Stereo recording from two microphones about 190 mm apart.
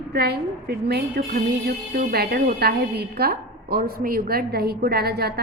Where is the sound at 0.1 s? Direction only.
55° right (ahead or behind).